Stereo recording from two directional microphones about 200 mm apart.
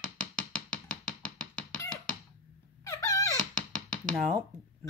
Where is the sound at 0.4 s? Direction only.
5° left (ahead or behind).